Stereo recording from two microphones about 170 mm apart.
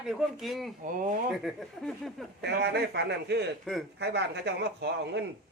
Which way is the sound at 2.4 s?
75° right (ahead or behind).